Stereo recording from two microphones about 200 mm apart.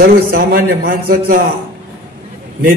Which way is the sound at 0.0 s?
45° right (ahead or behind).